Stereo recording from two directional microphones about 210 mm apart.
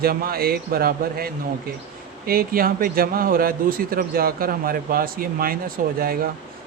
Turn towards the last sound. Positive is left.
turn(degrees=-45)  # may be behind; listen again after turning